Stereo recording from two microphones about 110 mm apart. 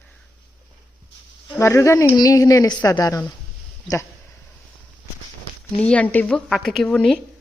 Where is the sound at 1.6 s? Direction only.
25° left (ahead or behind).